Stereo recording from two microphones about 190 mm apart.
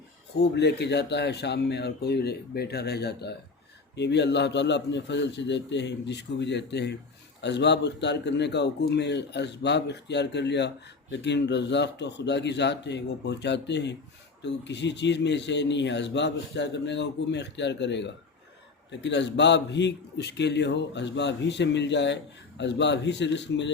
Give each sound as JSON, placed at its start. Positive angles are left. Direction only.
{"t": 0.3, "sound": "a man's voice", "side_deg": 65}